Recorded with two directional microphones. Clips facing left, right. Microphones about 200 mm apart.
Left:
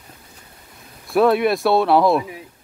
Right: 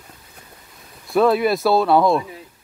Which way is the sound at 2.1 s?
15° left (ahead or behind).